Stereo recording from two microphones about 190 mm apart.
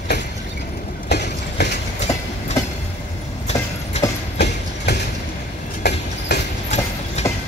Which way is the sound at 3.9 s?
35° left (ahead or behind).